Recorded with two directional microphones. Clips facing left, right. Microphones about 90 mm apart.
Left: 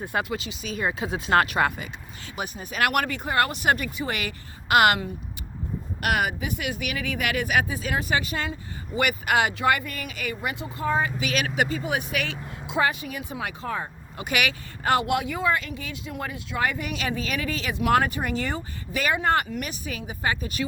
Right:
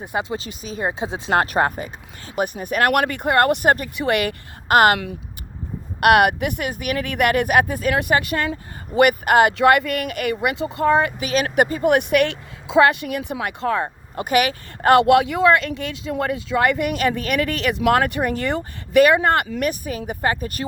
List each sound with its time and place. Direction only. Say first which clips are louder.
0.0 s speech: right 3 dB; 20° right (ahead or behind)
0.3 s speech: right 3 dB; 35° right (ahead or behind)
1.5 s speech: right 4 dB; 40° right (ahead or behind)
3.9 s speech: right 9 dB; 65° right (ahead or behind)
6.0 s speech: right 11 dB; 65° right (ahead or behind)
6.7 s speech: right 5 dB; 50° right (ahead or behind)
9.0 s speech: right 8 dB; 50° right (ahead or behind)
9.6 s speech: right 8 dB; 75° right (ahead or behind)
11.2 s speech: right 6 dB; 35° right (ahead or behind)
11.4 s speech: right 8 dB; 50° right (ahead or behind)
12.8 s speech: right 8 dB; 70° right (ahead or behind)
14.2 s speech: right 8 dB; 40° right (ahead or behind)
14.8 s speech: right 10 dB; 75° right (ahead or behind)
17.9 s speech: right 3 dB; 55° right (ahead or behind)